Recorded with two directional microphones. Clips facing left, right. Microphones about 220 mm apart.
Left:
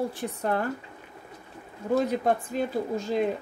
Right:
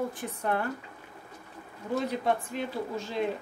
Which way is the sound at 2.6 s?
40° left (ahead or behind).